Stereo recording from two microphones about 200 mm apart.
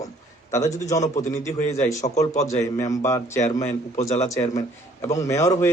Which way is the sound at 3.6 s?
35° left (ahead or behind).